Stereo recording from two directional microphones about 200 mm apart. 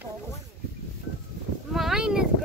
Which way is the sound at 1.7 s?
Centre (ahead or behind).